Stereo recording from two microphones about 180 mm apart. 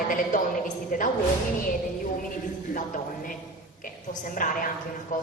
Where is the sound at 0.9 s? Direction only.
50° left (ahead or behind).